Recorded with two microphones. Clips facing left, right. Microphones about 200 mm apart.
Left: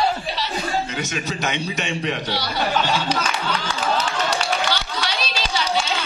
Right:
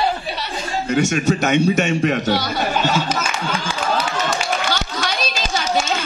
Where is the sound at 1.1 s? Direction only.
45° right (ahead or behind).